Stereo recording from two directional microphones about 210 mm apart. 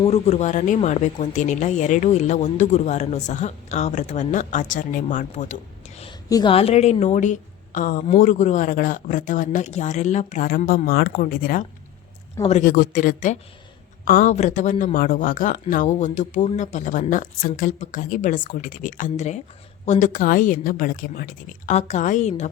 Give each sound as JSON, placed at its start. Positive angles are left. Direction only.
{"t": 0.0, "sound": "speech", "side_deg": 30}
{"t": 6.0, "sound": "a woman's voice", "side_deg": 20}